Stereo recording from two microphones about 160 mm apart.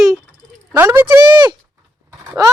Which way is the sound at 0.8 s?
15° right (ahead or behind).